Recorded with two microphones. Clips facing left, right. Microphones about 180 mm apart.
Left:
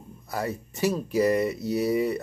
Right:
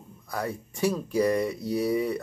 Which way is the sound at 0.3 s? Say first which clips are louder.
Left 1 dB; 5° left (ahead or behind).